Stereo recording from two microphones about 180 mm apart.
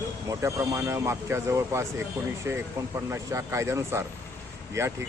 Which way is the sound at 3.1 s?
15° right (ahead or behind).